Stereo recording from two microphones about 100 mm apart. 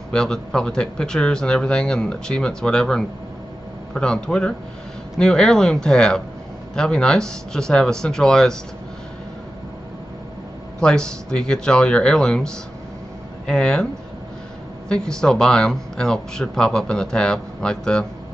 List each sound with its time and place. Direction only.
0.1 s speech: 5° left (ahead or behind)
10.8 s speech: 5° left (ahead or behind)
14.9 s speech: 5° left (ahead or behind)